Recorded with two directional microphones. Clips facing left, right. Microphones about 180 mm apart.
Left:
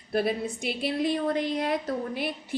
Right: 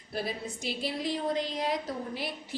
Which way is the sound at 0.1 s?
60° left (ahead or behind).